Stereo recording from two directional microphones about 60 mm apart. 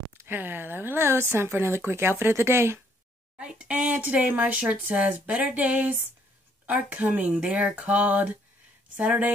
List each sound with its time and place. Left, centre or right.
0.3 s speech: right
3.3 s speech: centre